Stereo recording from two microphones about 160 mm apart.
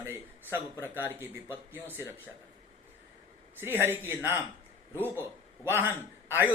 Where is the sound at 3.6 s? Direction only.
15° right (ahead or behind).